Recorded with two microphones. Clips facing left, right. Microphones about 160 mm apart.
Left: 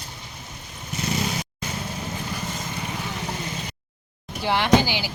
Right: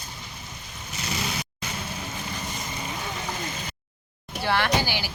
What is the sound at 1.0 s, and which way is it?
Vehicle, 50° left (ahead or behind).